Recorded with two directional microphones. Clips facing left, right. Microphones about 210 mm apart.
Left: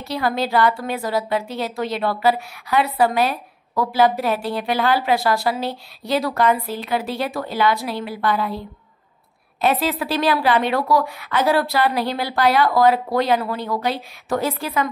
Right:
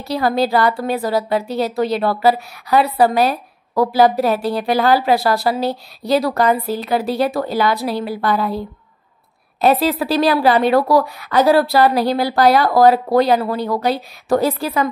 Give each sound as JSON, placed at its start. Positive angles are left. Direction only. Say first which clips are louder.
{"t": 0.0, "sound": "a woman's voice", "louder": "right 5 dB", "side_deg": -35}